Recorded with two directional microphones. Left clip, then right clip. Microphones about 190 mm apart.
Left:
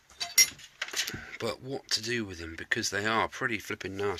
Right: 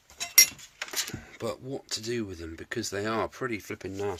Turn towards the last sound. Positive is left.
turn(degrees=0)  # may be behind; listen again after turning